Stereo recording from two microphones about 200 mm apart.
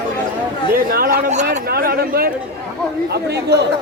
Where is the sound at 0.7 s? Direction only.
45° right (ahead or behind).